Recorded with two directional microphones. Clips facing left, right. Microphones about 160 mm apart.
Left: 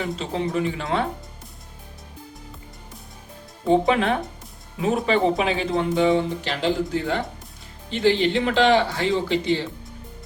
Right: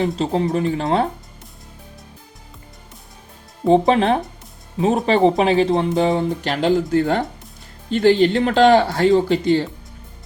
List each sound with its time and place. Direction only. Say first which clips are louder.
0.0 s speech: right 7 dB; 40° right (ahead or behind)
3.7 s speech: right 4 dB; 35° right (ahead or behind)